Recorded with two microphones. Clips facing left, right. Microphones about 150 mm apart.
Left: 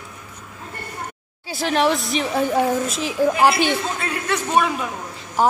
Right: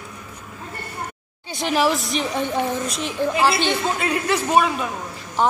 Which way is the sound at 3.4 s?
15° left (ahead or behind).